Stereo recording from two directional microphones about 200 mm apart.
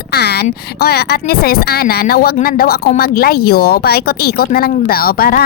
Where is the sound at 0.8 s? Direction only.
50° left (ahead or behind).